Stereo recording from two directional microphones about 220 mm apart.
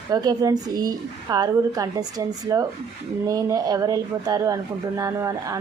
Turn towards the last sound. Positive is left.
turn(degrees=-15)  # may be behind; listen again after turning